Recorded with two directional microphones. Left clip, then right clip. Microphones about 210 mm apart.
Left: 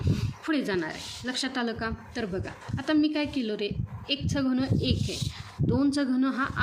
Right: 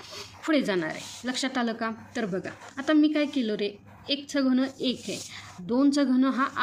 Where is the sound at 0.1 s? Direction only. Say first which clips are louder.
Right 4 dB; 25° right (ahead or behind).